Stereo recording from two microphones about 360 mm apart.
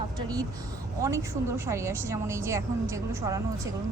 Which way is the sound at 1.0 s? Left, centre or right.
Centre.